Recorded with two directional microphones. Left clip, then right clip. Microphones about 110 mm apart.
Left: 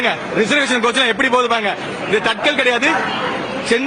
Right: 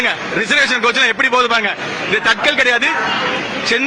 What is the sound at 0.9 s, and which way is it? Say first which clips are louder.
Speech: right 1 dB; 25° left (ahead or behind).